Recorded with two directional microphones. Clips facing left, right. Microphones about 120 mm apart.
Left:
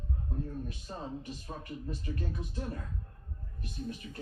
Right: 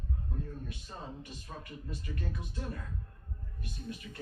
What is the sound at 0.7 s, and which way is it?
Speech, 35° left (ahead or behind).